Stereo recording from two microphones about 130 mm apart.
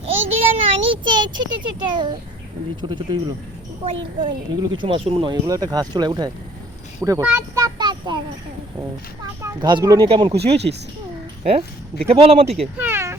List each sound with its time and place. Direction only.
0.0 s a child's voice: 50° right (ahead or behind)
5.5 s speech: 30° right (ahead or behind)
7.0 s a child's voice: 20° right (ahead or behind)
7.5 s child singing: 30° right (ahead or behind)
9.6 s speech: 35° right (ahead or behind)
12.0 s speech: 50° right (ahead or behind)
12.8 s a sound: 20° right (ahead or behind)